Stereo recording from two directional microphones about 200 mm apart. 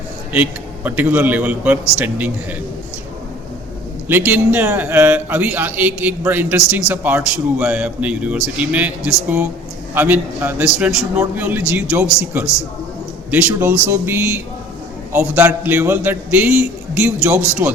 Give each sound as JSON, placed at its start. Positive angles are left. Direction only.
{"t": 0.9, "sound": "a man's voice", "side_deg": -10}
{"t": 4.3, "sound": "a man's voice", "side_deg": -10}
{"t": 13.3, "sound": "a man's voice", "side_deg": -10}